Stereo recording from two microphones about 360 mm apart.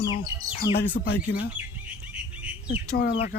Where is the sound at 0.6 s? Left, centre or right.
Left.